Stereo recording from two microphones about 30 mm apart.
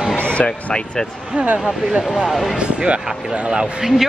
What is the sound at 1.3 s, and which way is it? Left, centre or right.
Speech, right.